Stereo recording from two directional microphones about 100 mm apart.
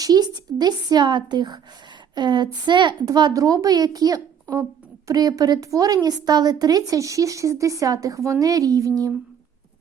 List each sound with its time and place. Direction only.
0.0 s a woman's voice: 40° right (ahead or behind)